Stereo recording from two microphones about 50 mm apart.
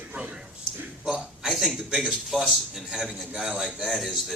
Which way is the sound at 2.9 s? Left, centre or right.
Centre.